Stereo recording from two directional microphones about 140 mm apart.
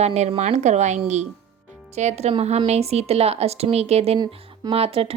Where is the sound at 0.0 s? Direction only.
50° right (ahead or behind).